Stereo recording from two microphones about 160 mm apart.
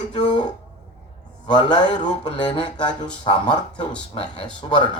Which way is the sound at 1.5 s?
30° left (ahead or behind).